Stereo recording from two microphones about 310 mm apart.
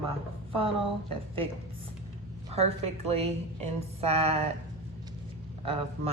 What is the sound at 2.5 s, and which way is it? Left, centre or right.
A woman's voice, centre.